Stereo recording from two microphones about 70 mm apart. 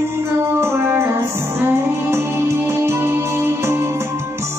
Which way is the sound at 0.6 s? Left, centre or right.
Right.